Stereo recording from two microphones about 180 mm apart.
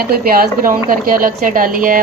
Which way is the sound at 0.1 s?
55° right (ahead or behind).